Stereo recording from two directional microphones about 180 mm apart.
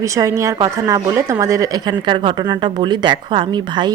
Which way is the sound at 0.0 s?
20° right (ahead or behind).